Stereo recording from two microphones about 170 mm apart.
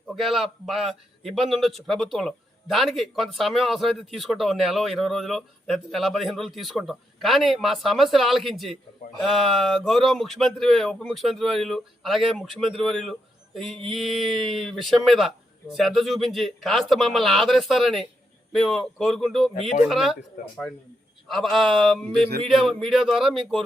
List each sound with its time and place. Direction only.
0.2 s a man's voice: centre (ahead or behind)
21.2 s a man's voice: centre (ahead or behind)